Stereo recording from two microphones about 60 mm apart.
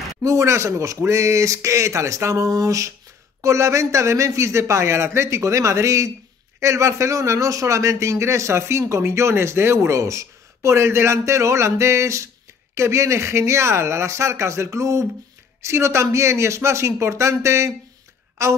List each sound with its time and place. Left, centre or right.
0.2 s a man's voice: right
3.3 s a man's voice: right